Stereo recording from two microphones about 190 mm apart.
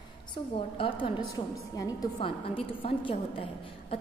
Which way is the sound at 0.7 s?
30° left (ahead or behind).